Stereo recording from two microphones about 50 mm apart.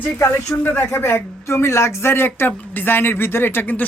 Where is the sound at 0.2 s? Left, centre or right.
Left.